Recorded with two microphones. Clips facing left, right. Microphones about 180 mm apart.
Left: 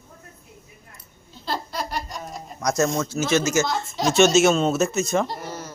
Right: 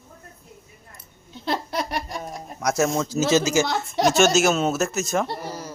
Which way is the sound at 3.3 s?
15° right (ahead or behind).